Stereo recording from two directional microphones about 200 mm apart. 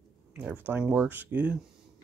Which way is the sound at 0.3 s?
5° right (ahead or behind).